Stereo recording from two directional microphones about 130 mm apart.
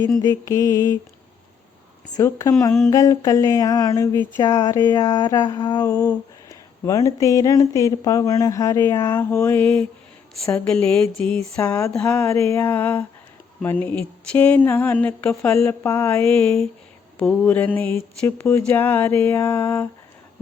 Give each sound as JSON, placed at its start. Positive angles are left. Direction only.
{"t": 0.2, "sound": "speech", "side_deg": 30}
{"t": 2.1, "sound": "speech", "side_deg": 25}
{"t": 4.9, "sound": "a sound", "side_deg": 35}
{"t": 6.5, "sound": "speech", "side_deg": 25}
{"t": 11.6, "sound": "speech", "side_deg": 25}